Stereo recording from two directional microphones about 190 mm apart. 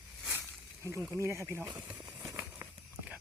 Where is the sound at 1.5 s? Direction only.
15° right (ahead or behind).